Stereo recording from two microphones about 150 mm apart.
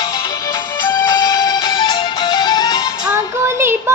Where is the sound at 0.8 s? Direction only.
25° left (ahead or behind).